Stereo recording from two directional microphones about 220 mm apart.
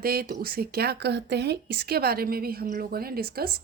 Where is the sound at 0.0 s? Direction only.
45° right (ahead or behind).